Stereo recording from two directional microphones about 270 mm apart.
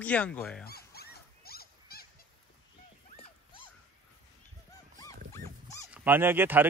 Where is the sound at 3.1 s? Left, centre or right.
Centre.